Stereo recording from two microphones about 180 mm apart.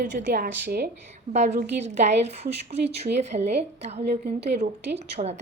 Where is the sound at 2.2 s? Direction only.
35° right (ahead or behind).